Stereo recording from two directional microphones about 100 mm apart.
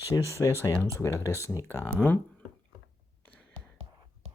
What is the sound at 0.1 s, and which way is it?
Speech, 30° left (ahead or behind).